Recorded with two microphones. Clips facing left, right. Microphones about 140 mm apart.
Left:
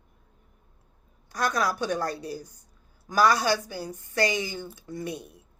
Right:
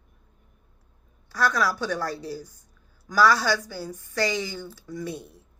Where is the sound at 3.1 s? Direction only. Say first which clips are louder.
Right 1 dB; 20° left (ahead or behind).